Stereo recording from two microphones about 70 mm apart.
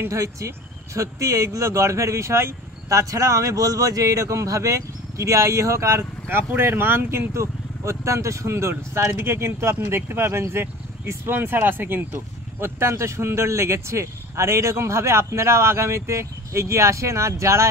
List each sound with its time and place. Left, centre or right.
0.0 s speech: right